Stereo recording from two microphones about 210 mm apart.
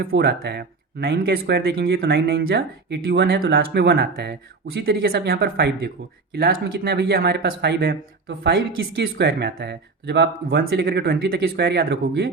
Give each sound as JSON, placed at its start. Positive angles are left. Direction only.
{"t": 0.0, "sound": "speech", "side_deg": -55}